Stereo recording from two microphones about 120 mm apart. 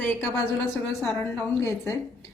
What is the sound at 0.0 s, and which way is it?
Speech, 20° left (ahead or behind).